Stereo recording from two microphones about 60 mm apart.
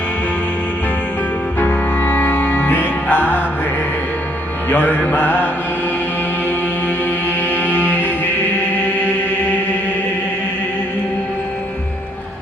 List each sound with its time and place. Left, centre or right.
1.5 s music: left
4.7 s music: left
7.5 s music: left